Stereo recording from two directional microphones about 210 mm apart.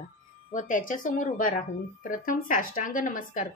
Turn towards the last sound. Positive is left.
turn(degrees=40)  # may be behind; listen again after turning